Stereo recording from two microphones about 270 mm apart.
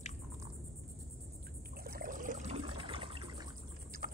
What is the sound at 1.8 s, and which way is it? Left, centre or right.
Pour, right.